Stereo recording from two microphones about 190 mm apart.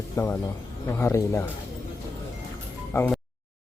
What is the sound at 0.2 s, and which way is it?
Speech, 15° left (ahead or behind).